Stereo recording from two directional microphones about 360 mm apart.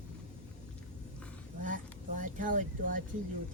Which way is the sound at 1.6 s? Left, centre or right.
Right.